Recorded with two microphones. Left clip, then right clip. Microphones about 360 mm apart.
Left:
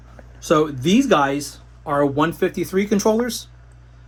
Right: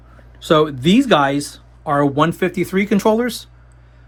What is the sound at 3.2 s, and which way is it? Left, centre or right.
Speech, centre.